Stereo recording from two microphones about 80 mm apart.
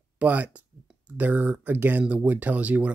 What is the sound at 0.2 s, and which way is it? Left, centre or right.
Speech, centre.